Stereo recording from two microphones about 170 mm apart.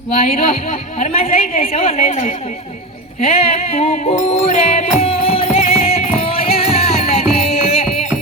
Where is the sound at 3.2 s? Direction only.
35° left (ahead or behind).